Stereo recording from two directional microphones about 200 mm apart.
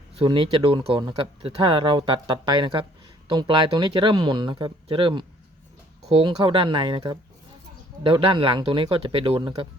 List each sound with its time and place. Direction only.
0.2 s speech: 25° right (ahead or behind)